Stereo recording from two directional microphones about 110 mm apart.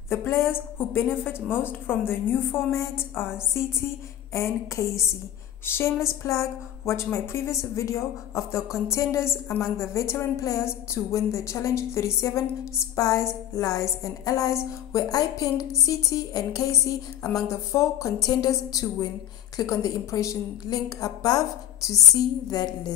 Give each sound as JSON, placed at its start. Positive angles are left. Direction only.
{"t": 0.1, "sound": "a woman's voice", "side_deg": 25}
{"t": 4.3, "sound": "a woman's voice", "side_deg": 25}